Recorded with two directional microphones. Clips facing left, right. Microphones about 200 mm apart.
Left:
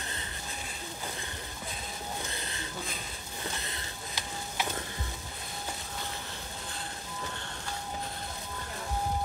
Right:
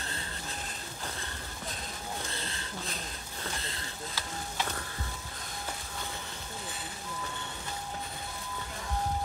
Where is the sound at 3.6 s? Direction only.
20° left (ahead or behind).